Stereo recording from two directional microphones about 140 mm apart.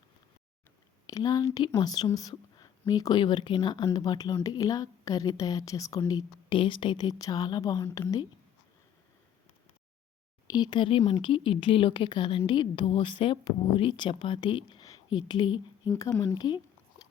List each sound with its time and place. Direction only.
1.0 s speech: 25° left (ahead or behind)
10.5 s speech: 30° left (ahead or behind)